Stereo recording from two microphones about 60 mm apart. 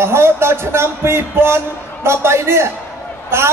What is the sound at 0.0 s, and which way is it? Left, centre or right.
A man's voice, right.